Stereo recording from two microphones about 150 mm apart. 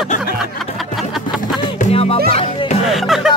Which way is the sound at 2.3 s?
40° left (ahead or behind).